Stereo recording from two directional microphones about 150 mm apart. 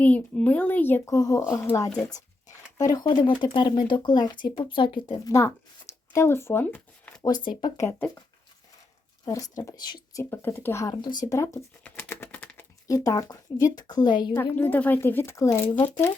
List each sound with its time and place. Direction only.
0.0 s speech: 10° left (ahead or behind)
9.2 s speech: 25° left (ahead or behind)
10.2 s speech: 15° left (ahead or behind)
10.9 s speech: 30° left (ahead or behind)
11.8 s typing: 10° left (ahead or behind)
12.9 s speech: 25° left (ahead or behind)
14.5 s speech: 10° left (ahead or behind)